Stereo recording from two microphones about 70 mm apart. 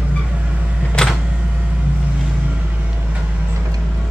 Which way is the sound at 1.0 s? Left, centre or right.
Centre.